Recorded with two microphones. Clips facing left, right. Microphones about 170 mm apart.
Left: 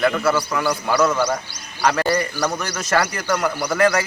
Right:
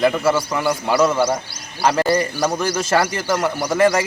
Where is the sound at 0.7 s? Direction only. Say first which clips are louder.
Right 2 dB; 25° right (ahead or behind).